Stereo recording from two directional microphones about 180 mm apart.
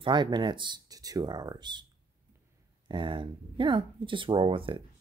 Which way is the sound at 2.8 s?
30° right (ahead or behind).